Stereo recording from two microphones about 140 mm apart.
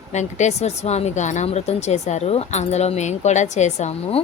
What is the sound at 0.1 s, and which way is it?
Speech, 55° left (ahead or behind).